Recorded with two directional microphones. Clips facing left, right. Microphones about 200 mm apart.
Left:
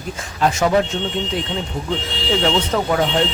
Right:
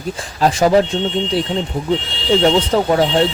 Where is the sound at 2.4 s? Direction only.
30° right (ahead or behind).